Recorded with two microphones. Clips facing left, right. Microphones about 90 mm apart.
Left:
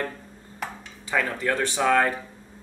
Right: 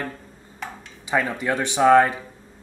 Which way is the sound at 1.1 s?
15° right (ahead or behind).